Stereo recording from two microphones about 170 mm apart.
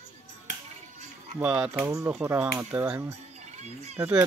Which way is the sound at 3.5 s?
40° right (ahead or behind).